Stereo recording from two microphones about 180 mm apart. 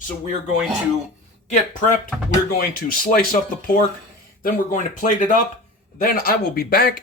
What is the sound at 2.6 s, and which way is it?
Speech, 55° left (ahead or behind).